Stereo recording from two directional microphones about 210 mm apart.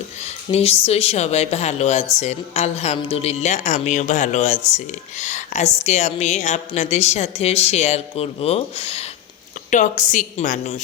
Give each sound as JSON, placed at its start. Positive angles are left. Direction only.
{"t": 0.5, "sound": "a woman's voice", "side_deg": 30}